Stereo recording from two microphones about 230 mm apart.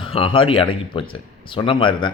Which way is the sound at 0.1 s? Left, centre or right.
Left.